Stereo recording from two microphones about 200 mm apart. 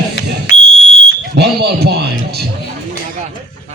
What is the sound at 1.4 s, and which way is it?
A man's voice, 55° right (ahead or behind).